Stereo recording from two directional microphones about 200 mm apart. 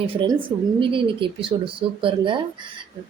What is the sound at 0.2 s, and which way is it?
Speech, 25° right (ahead or behind).